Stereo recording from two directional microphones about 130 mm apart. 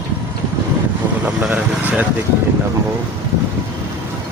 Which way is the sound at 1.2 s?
10° right (ahead or behind).